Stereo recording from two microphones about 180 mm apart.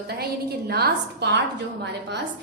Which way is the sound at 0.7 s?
65° right (ahead or behind).